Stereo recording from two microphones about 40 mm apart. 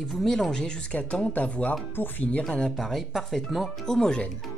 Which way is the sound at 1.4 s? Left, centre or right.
Left.